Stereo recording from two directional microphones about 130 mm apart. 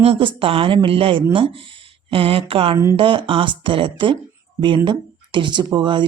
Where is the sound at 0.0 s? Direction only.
45° right (ahead or behind).